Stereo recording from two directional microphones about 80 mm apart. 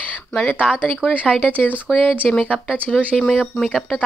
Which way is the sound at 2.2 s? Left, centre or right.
Centre.